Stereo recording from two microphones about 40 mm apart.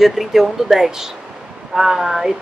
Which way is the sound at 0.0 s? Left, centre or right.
Centre.